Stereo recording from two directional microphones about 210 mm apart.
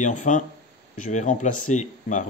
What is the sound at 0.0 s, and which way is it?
Speech, 35° left (ahead or behind).